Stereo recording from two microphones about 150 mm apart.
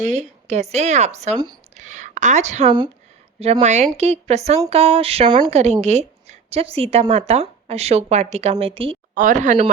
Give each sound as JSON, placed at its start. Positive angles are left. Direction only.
{"t": 0.0, "sound": "a woman's voice", "side_deg": -50}
{"t": 4.7, "sound": "a sound", "side_deg": -40}
{"t": 5.5, "sound": "a woman's voice", "side_deg": -45}
{"t": 9.1, "sound": "speech", "side_deg": -60}